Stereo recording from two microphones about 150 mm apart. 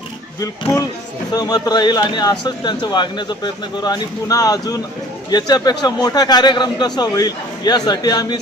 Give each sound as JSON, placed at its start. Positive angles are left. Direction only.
{"t": 0.3, "sound": "speech", "side_deg": 20}